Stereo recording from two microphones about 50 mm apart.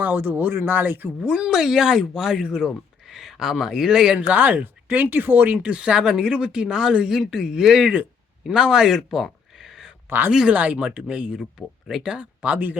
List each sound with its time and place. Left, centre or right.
0.0 s speech: right
1.2 s speech: centre
4.3 s speech: right
5.7 s speech: right
9.0 s a sound: centre
10.1 s speech: right
10.5 s speech: right